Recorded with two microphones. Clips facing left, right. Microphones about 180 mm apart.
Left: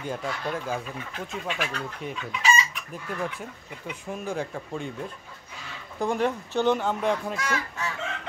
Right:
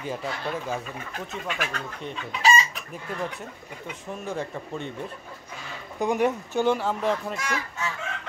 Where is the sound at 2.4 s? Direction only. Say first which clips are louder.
Right 3 dB; 35° right (ahead or behind).